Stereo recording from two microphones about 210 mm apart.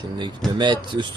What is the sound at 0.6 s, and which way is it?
Speech, 20° right (ahead or behind).